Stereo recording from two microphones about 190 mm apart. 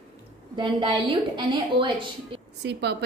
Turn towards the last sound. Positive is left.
turn(degrees=-60)  # may be behind; listen again after turning